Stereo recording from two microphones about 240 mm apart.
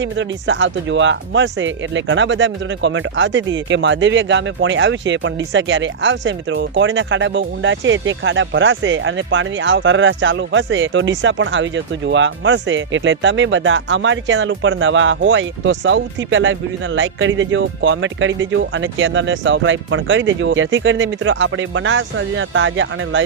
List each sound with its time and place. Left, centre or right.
0.0 s speech: right